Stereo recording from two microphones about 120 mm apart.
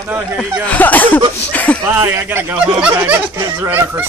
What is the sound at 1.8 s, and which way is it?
A child's voice, 15° right (ahead or behind).